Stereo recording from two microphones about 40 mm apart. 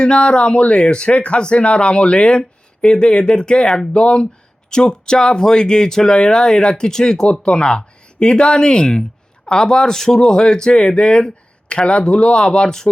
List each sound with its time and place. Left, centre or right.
0.0 s speech: left
10.2 s speech: left